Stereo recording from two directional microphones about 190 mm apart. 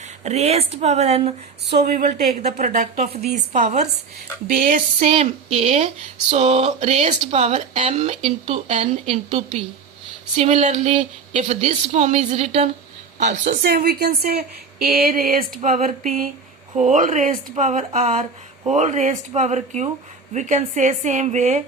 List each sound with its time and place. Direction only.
0.3 s speech: 35° right (ahead or behind)
1.6 s speech: 50° right (ahead or behind)
4.4 s female singing: 45° right (ahead or behind)
5.1 s speech: 30° right (ahead or behind)
13.1 s female singing: 40° right (ahead or behind)
16.7 s speech: 40° right (ahead or behind)